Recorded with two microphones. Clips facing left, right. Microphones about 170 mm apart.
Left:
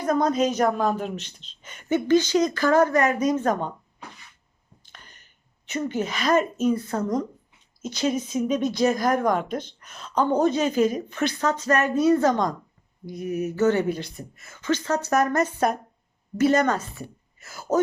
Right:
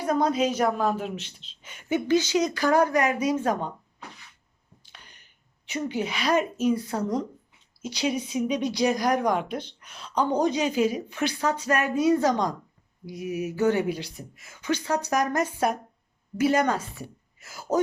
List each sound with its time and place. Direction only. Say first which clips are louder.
0.0 s speech: left 2 dB; 10° right (ahead or behind)
0.3 s a woman's voice: left 2 dB; 45° left (ahead or behind)
0.8 s speech: left 2 dB; 5° right (ahead or behind)
1.2 s a woman's voice: even; 45° left (ahead or behind)
1.7 s speech: left 3 dB; 10° right (ahead or behind)
4.8 s a sound: left 2 dB; 50° left (ahead or behind)
5.9 s a woman's voice: left 2 dB; 45° left (ahead or behind)
6.7 s speech: left 2 dB; 10° right (ahead or behind)
8.4 s a woman's voice: left 3 dB; 50° left (ahead or behind)
10.4 s a woman's voice: left 3 dB; 15° right (ahead or behind)